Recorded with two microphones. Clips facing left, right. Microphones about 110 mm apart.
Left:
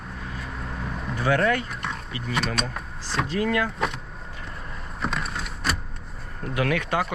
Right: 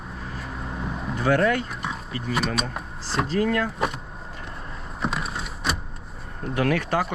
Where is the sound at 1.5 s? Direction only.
5° right (ahead or behind).